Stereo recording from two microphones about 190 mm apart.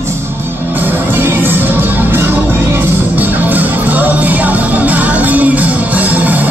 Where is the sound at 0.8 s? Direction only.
10° right (ahead or behind).